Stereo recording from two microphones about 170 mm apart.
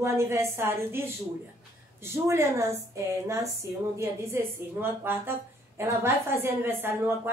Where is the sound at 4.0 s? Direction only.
15° right (ahead or behind).